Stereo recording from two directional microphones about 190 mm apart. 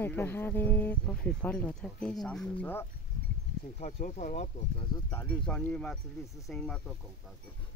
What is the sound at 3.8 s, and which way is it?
Speech, 40° left (ahead or behind).